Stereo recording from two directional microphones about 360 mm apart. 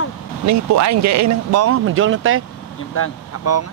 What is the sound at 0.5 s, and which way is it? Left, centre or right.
Speech, right.